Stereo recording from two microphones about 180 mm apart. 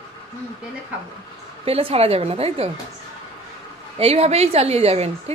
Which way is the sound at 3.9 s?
35° right (ahead or behind).